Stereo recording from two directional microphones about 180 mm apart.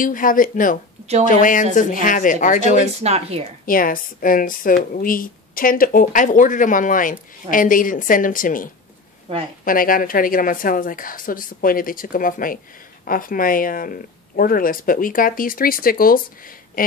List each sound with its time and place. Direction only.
0.0 s speech: 50° left (ahead or behind)
3.0 s speech: 35° right (ahead or behind)
3.6 s speech: 50° left (ahead or behind)
9.7 s speech: 50° left (ahead or behind)
16.8 s a sound: 50° left (ahead or behind)